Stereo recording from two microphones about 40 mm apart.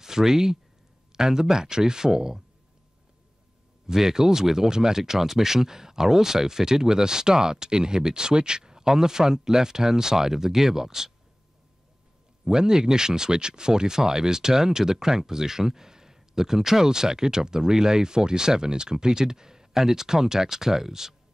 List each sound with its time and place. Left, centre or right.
0.0 s speech: centre
3.8 s speech: centre
12.4 s speech: centre